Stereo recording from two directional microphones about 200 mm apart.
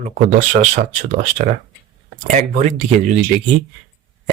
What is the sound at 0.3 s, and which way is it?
Speech, 35° right (ahead or behind).